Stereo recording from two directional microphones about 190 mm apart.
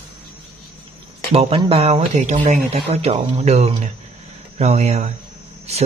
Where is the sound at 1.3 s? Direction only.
30° right (ahead or behind).